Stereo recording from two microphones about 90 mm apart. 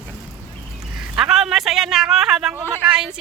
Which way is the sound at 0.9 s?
5° right (ahead or behind).